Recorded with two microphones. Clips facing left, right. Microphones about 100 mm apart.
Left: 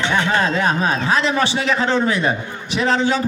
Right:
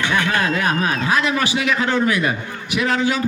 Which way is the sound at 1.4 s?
30° left (ahead or behind).